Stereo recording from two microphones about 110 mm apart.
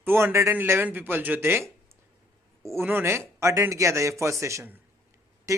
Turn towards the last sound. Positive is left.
turn(degrees=-30)  # may be behind; listen again after turning